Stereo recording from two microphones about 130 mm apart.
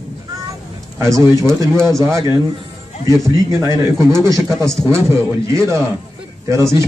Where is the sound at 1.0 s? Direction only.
25° right (ahead or behind).